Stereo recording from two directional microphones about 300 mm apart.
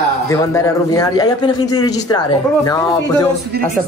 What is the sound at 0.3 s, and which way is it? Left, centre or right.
A man's voice, centre.